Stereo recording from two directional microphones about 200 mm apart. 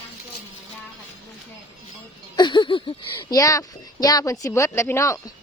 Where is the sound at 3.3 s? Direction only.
15° left (ahead or behind).